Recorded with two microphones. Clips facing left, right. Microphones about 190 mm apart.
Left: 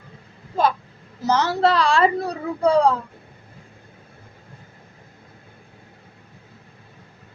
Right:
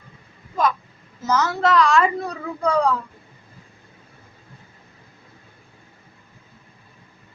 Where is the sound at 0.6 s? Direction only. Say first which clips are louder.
Left 1 dB; 30° left (ahead or behind).